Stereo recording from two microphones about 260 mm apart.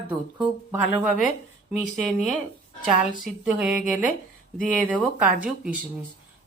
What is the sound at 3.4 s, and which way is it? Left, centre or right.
Speech, centre.